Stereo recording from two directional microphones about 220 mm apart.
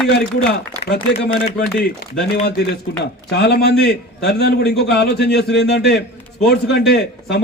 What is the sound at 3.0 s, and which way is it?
A man's voice, 50° left (ahead or behind).